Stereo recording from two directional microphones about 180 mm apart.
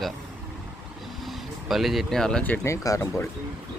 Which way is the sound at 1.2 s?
Centre (ahead or behind).